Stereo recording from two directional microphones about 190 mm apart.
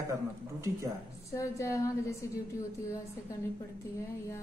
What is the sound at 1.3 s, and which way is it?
Speech, 15° left (ahead or behind).